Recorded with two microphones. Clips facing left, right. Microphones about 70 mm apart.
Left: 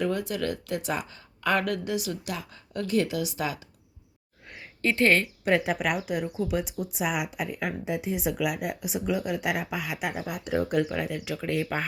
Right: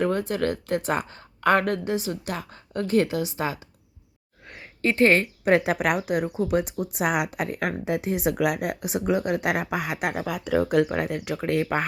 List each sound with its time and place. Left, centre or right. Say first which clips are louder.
0.0 s speech: right 4 dB; right
4.8 s speech: right 3 dB; right
5.5 s speech: right 4 dB; right
10.8 s speech: right 4 dB; right